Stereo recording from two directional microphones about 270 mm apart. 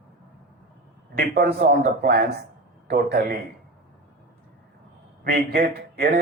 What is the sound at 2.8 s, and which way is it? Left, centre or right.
Speech, right.